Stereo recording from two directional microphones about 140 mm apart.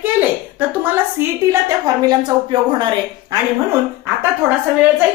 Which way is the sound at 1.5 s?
30° right (ahead or behind).